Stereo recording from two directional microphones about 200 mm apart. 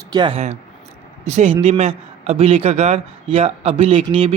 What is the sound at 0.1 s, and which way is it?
A man's voice, 25° right (ahead or behind).